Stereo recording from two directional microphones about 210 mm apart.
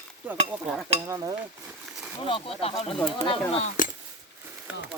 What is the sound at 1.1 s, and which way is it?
Speech, 15° right (ahead or behind).